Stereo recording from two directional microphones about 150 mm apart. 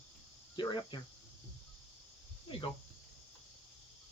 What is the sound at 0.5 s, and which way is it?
Speech, 30° left (ahead or behind).